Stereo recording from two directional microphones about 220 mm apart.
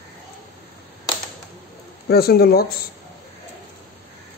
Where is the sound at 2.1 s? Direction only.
45° left (ahead or behind).